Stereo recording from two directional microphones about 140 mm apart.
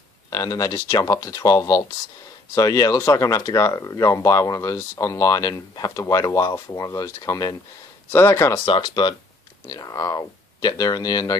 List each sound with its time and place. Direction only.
0.3 s speech: 25° left (ahead or behind)
8.6 s speech: 35° left (ahead or behind)